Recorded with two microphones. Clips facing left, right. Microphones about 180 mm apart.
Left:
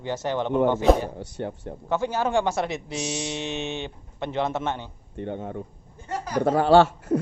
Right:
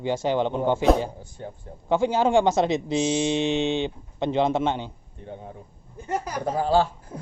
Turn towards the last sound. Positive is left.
turn(degrees=80)